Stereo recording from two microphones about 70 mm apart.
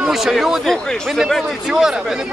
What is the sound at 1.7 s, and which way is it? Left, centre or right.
Speech, centre.